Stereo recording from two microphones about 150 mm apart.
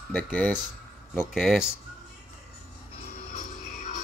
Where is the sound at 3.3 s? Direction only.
60° left (ahead or behind).